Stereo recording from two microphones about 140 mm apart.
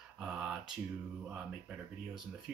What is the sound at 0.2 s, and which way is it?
Mantra, 5° right (ahead or behind).